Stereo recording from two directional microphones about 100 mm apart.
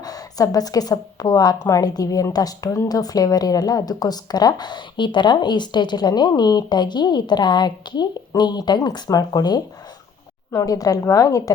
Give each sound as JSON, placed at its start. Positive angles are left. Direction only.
{"t": 0.0, "sound": "a woman's voice", "side_deg": 40}